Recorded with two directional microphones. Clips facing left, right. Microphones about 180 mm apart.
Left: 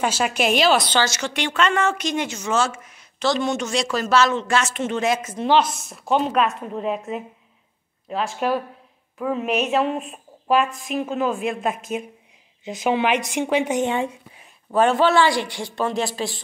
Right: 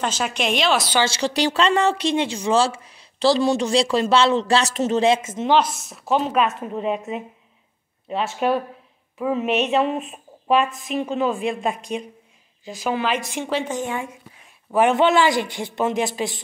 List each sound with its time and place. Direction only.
0.0 s a woman's voice: 5° left (ahead or behind)
1.0 s a woman's voice: 30° right (ahead or behind)
5.6 s a woman's voice: centre (ahead or behind)
8.1 s a woman's voice: centre (ahead or behind)
12.6 s a woman's voice: 20° left (ahead or behind)
14.7 s speech: 15° right (ahead or behind)